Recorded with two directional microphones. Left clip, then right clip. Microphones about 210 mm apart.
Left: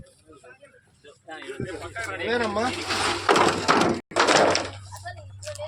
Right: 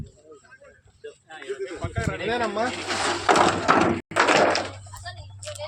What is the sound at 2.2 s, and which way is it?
Speech, 55° left (ahead or behind).